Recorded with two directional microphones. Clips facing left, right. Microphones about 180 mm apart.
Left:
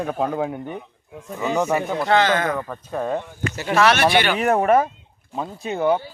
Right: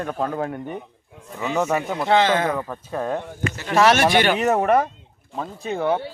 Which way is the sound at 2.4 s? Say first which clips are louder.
Even; 5° right (ahead or behind).